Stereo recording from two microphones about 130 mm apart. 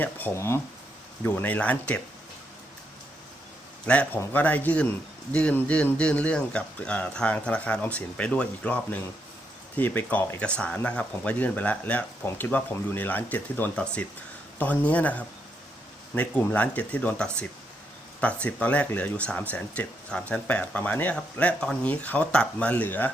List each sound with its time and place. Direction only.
0.0 s speech: 15° left (ahead or behind)
3.8 s speech: 10° left (ahead or behind)